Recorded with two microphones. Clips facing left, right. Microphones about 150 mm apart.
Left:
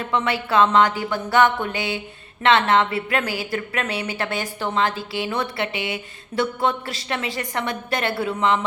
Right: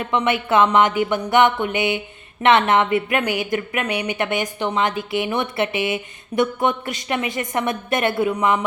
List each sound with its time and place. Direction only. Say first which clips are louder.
0.1 s a woman's voice: right 3 dB; 20° right (ahead or behind)